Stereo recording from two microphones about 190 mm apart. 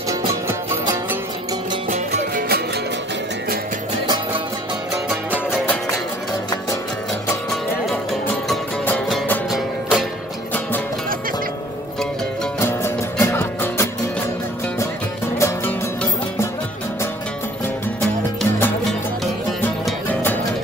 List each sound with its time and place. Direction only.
0.2 s music: 15° right (ahead or behind)
1.9 s music: 50° right (ahead or behind)
7.9 s music: 5° left (ahead or behind)
12.5 s music: 10° left (ahead or behind)
15.3 s music: 10° left (ahead or behind)
18.0 s music: 5° left (ahead or behind)